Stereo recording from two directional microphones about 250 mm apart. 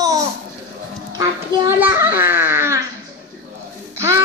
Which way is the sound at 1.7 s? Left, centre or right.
Centre.